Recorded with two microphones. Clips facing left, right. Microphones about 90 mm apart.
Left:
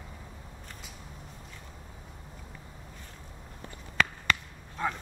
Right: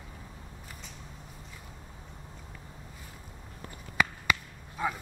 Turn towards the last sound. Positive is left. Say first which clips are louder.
# even
turn(degrees=-5)  # may be behind; listen again after turning